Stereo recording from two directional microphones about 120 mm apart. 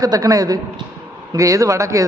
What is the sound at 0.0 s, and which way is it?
A woman's voice, 30° right (ahead or behind).